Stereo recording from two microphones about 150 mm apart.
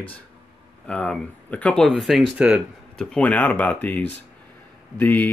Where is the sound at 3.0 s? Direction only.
5° left (ahead or behind).